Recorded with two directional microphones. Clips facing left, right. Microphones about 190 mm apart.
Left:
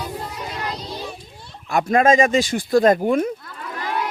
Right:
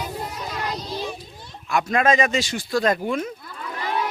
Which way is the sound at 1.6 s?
35° left (ahead or behind).